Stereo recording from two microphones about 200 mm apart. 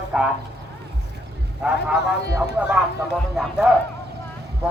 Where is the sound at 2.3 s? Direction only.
10° right (ahead or behind).